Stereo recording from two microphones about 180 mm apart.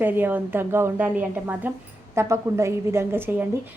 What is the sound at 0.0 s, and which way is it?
A woman's voice, 10° right (ahead or behind).